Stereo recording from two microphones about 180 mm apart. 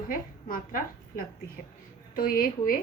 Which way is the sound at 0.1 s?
50° left (ahead or behind).